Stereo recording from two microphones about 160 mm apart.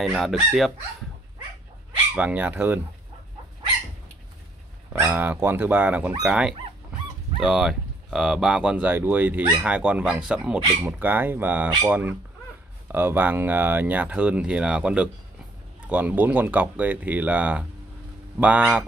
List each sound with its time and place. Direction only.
0.0 s speech: centre (ahead or behind)
2.1 s speech: 10° right (ahead or behind)
4.9 s speech: 15° right (ahead or behind)